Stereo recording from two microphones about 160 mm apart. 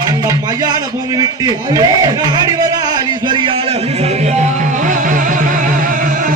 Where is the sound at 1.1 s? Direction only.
25° right (ahead or behind).